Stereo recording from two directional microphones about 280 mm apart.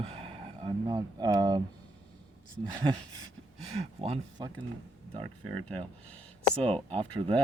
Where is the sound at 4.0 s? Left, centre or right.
Right.